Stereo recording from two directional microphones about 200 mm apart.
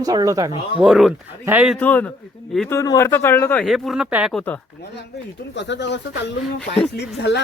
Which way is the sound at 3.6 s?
Centre (ahead or behind).